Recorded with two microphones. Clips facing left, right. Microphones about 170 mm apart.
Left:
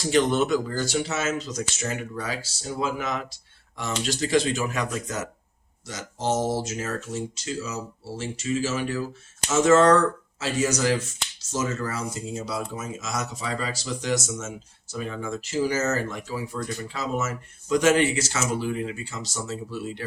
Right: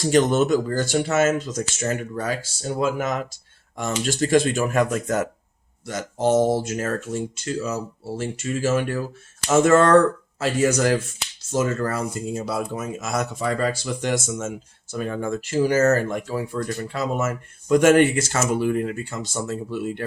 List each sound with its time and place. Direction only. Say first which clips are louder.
0.0 s speech: right 3 dB; 45° right (ahead or behind)